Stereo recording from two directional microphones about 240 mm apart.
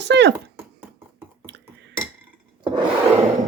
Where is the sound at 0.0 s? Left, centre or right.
Right.